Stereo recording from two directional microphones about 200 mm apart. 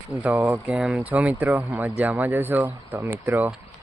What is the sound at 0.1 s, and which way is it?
Speech, 10° right (ahead or behind).